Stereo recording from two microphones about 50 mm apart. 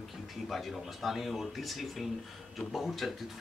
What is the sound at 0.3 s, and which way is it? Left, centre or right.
Speech, centre.